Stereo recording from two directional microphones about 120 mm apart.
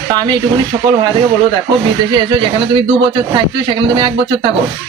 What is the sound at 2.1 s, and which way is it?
Speech, 40° right (ahead or behind).